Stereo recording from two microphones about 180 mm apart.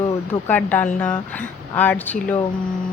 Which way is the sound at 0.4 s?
10° left (ahead or behind).